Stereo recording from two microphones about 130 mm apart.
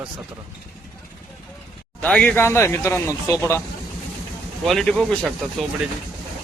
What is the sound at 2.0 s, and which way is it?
Speech, 10° left (ahead or behind).